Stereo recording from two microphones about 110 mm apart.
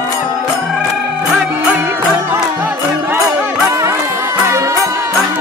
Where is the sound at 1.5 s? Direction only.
20° right (ahead or behind).